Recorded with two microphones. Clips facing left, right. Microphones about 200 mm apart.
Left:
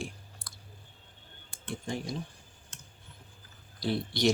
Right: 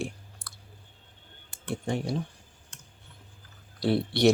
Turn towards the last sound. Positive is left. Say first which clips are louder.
# right 6 dB
turn(degrees=-65)  # may be behind; listen again after turning